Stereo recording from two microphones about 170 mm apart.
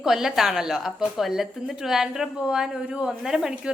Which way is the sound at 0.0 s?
5° right (ahead or behind).